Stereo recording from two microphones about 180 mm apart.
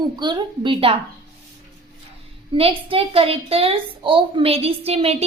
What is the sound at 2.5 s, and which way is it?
A woman's voice, 30° right (ahead or behind).